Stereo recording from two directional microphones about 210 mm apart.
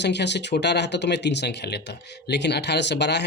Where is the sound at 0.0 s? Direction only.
55° left (ahead or behind).